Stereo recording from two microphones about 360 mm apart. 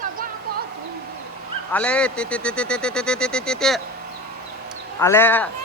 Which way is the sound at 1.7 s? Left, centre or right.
Centre.